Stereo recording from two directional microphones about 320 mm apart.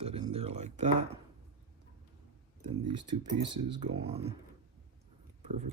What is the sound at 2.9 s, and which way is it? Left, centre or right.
Speech, centre.